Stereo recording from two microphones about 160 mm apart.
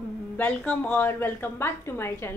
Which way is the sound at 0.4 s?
10° left (ahead or behind).